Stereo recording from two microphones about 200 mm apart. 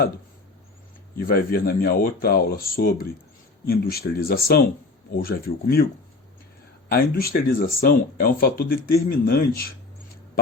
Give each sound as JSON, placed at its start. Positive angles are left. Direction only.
{"t": 1.1, "sound": "speech", "side_deg": 50}
{"t": 6.8, "sound": "speech", "side_deg": 50}